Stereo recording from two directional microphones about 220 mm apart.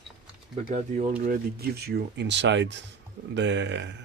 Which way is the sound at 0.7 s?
30° right (ahead or behind).